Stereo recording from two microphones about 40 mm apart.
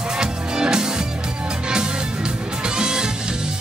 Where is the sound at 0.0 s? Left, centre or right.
Centre.